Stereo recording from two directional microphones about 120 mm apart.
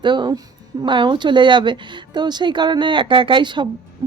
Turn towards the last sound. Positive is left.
turn(degrees=-40)  # may be behind; listen again after turning